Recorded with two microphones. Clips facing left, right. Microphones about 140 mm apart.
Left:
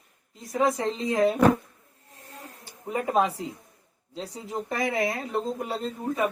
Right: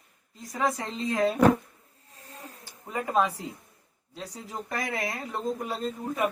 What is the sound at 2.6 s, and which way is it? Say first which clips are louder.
Speech: left 4 dB; 25° left (ahead or behind).